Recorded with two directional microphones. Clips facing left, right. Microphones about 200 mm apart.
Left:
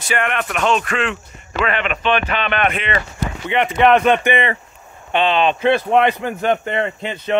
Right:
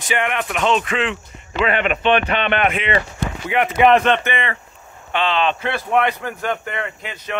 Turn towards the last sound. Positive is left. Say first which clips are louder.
# left 8 dB
turn(degrees=25)  # may be behind; listen again after turning